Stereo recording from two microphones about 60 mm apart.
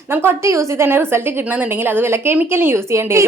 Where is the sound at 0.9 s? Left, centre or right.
Right.